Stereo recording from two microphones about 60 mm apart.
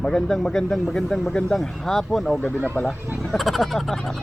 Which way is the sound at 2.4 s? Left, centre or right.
Left.